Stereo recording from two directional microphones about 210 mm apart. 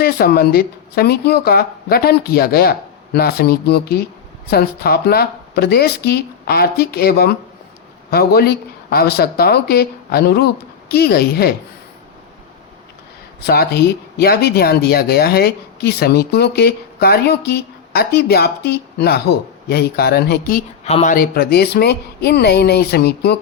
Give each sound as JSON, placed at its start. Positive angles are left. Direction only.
{"t": 0.0, "sound": "speech", "side_deg": 45}
{"t": 13.4, "sound": "speech", "side_deg": 50}